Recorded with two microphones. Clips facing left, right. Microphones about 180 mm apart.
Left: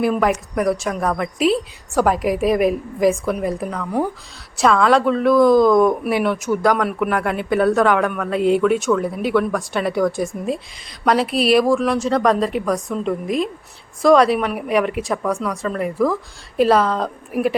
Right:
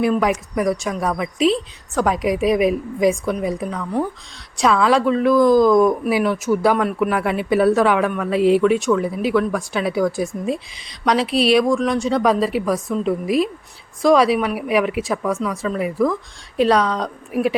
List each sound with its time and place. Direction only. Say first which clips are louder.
0.0 s a woman's voice: even; centre (ahead or behind)